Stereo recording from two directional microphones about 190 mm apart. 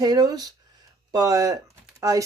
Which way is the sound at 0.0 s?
20° right (ahead or behind).